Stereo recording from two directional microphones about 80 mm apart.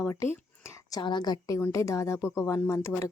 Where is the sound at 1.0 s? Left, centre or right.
Left.